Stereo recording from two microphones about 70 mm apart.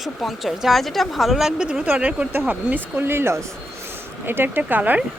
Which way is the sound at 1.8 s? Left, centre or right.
Right.